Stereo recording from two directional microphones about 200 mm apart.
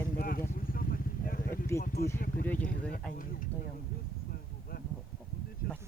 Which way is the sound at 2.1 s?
45° left (ahead or behind).